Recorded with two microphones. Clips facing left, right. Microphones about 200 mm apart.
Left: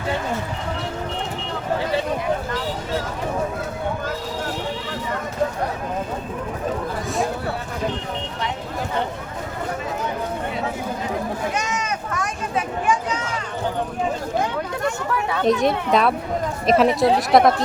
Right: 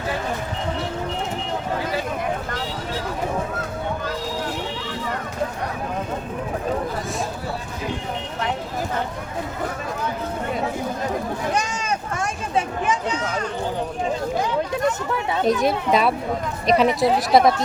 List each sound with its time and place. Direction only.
11.5 s a sound: 30° right (ahead or behind)
14.8 s speech: 25° right (ahead or behind)
15.4 s speech: centre (ahead or behind)